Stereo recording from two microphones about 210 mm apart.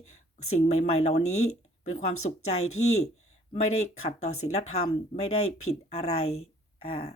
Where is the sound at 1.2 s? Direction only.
85° left.